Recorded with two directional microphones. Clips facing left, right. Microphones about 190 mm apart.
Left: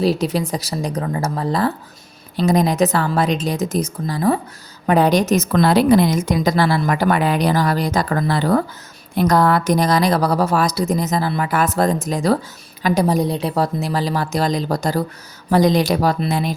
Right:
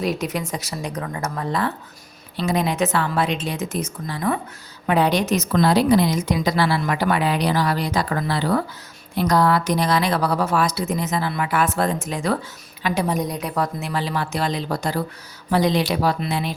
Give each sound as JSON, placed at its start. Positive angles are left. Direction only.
{"t": 0.0, "sound": "a woman's voice", "side_deg": 30}